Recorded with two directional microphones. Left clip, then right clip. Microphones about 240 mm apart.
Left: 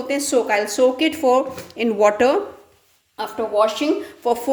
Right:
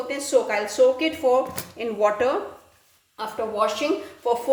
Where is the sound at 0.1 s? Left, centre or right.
Left.